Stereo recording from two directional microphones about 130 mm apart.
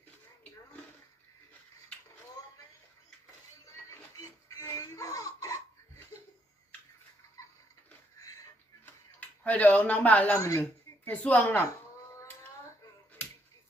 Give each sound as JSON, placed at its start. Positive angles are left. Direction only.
{"t": 3.8, "sound": "music", "side_deg": 25}
{"t": 9.2, "sound": "speech", "side_deg": 10}
{"t": 10.3, "sound": "a woman's voice", "side_deg": 20}
{"t": 10.6, "sound": "speech", "side_deg": 10}
{"t": 12.1, "sound": "a sound", "side_deg": 20}